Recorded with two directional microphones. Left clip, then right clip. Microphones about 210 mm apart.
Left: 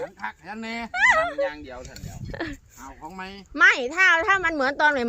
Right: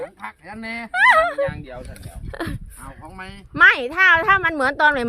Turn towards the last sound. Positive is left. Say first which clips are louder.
# right 4 dB
turn(degrees=-10)  # may be behind; listen again after turning